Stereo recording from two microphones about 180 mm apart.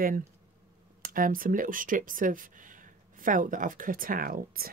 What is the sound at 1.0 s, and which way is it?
Speech, 50° right (ahead or behind).